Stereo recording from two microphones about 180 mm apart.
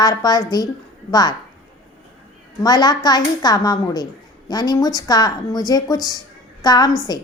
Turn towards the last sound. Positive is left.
turn(degrees=20)  # may be behind; listen again after turning